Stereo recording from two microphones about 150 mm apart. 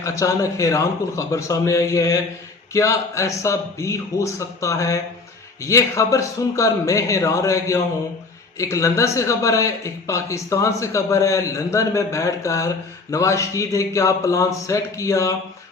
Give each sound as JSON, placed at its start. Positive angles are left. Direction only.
{"t": 0.0, "sound": "a man's voice", "side_deg": 20}